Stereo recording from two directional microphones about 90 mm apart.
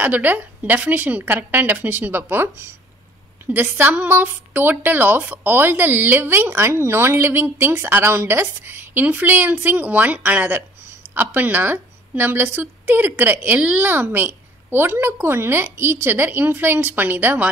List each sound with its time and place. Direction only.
0.0 s a woman's voice: 20° right (ahead or behind)